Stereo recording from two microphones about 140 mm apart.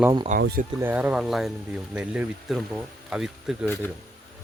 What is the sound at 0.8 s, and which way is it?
Speech, 15° right (ahead or behind).